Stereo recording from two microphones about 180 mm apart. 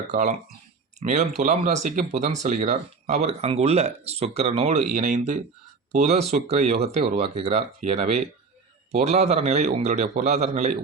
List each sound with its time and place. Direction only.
0.1 s speech: 40° right (ahead or behind)
4.9 s speech: 45° right (ahead or behind)